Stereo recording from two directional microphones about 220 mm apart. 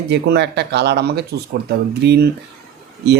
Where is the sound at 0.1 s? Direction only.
50° right (ahead or behind).